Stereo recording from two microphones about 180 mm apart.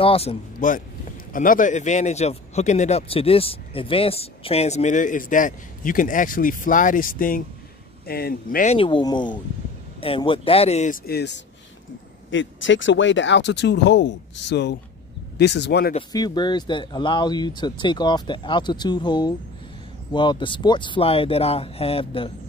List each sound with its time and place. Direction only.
0.0 s a man's voice: 35° left (ahead or behind); by 8.7 s 50° left (ahead or behind)
8.7 s speech: 25° left (ahead or behind)
11.1 s speech: 70° left (ahead or behind)
12.3 s speech: 90° left; by 15.9 s 70° left (ahead or behind)
16.1 s speech: 20° left (ahead or behind)